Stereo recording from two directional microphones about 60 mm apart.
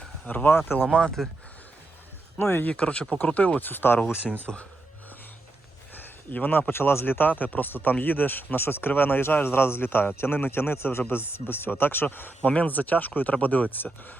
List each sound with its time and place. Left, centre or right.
0.3 s speech: left
1.2 s speech: centre
2.4 s speech: left
2.6 s speech: left
3.7 s speech: left
4.5 s speech: centre
5.9 s speech: left